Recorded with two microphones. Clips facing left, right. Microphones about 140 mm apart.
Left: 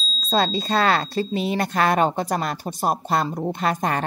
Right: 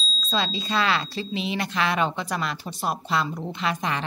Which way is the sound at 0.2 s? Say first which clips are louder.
Left 6 dB; 45° left (ahead or behind).